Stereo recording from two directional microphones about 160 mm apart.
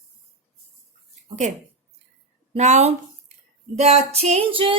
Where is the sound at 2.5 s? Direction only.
45° right (ahead or behind).